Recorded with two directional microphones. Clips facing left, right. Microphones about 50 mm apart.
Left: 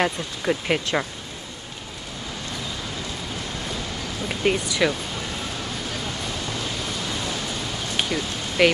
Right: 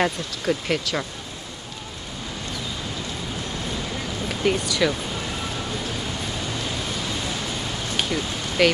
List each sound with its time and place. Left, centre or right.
0.0 s speech: centre
4.3 s speech: centre
8.0 s a sound: centre